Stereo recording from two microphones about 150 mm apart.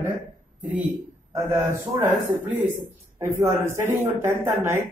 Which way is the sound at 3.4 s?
20° right (ahead or behind).